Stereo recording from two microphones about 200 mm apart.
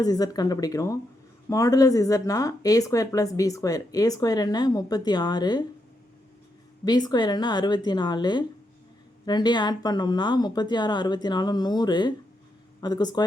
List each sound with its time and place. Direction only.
0.0 s speech: 20° left (ahead or behind)
6.8 s speech: 20° left (ahead or behind)